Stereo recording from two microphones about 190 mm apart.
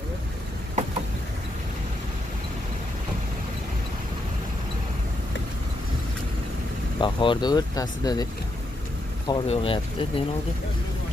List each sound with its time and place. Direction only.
7.0 s speech: 25° left (ahead or behind)
9.3 s speech: 30° left (ahead or behind)